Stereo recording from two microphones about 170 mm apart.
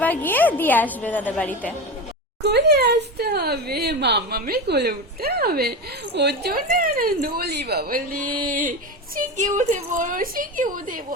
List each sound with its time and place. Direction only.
0.0 s a woman's voice: 10° left (ahead or behind)
2.4 s speech: 75° right (ahead or behind)
6.1 s a woman's voice: 75° right (ahead or behind); by 11.0 s 55° right (ahead or behind)